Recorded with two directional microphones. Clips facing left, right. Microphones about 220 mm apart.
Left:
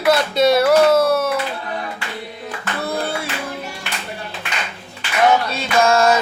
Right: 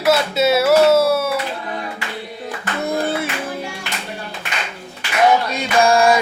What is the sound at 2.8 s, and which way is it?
Clapping, 20° right (ahead or behind).